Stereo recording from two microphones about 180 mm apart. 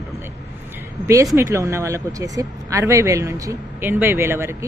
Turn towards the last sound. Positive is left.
turn(degrees=-15)  # may be behind; listen again after turning